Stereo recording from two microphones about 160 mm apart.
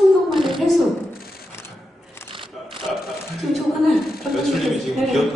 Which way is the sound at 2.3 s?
30° right (ahead or behind).